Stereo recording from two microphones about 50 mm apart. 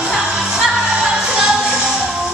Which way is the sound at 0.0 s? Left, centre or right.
Centre.